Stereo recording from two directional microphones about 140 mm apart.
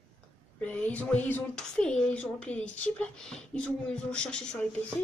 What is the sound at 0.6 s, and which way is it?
A woman's voice, 10° left (ahead or behind).